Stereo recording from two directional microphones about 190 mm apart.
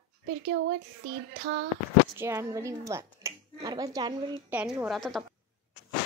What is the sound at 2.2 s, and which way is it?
Speech, 15° right (ahead or behind).